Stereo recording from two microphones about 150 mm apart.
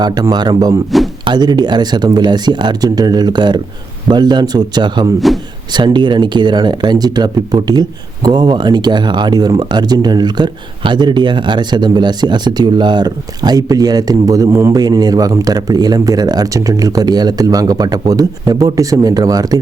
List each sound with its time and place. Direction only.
0.0 s speech: 25° right (ahead or behind)